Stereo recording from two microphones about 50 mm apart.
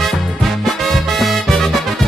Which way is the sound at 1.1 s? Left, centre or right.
Centre.